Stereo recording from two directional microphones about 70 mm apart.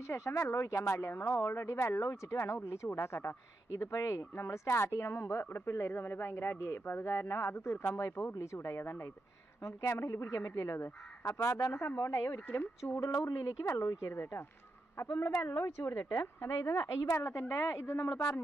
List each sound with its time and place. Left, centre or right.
0.0 s a man's voice: left
11.8 s a man's voice: left
13.0 s speech: left
14.1 s a man's voice: left